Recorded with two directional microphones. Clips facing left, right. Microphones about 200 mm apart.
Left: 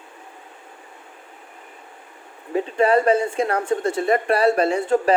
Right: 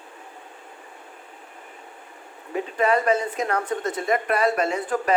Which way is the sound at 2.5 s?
30° left (ahead or behind).